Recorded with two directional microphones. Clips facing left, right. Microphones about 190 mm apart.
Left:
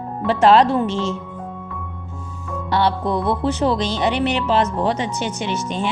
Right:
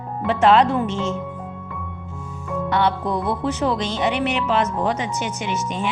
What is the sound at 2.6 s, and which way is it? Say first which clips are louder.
Speech: left 2 dB; 35° left (ahead or behind).